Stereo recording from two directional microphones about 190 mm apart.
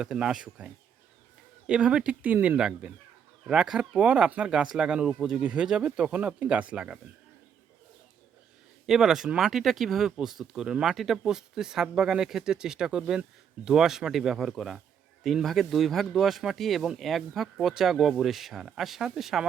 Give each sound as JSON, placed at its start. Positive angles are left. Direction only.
{"t": 0.0, "sound": "speech", "side_deg": -5}
{"t": 8.9, "sound": "speech", "side_deg": 0}